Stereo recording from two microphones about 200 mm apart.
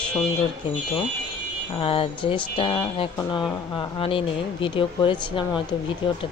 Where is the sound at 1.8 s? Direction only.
25° left (ahead or behind).